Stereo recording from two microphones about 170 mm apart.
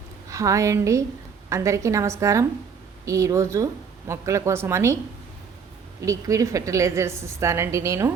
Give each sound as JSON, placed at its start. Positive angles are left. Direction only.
{"t": 0.3, "sound": "a woman's voice", "side_deg": -20}
{"t": 6.1, "sound": "a woman's voice", "side_deg": -20}